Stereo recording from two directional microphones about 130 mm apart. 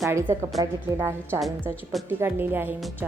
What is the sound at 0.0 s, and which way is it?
A woman's voice, 20° right (ahead or behind).